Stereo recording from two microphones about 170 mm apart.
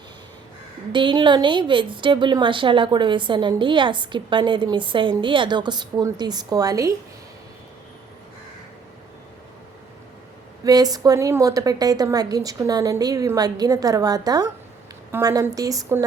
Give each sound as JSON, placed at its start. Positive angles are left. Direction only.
{"t": 0.9, "sound": "a woman's voice", "side_deg": -30}
{"t": 10.6, "sound": "a woman's voice", "side_deg": -20}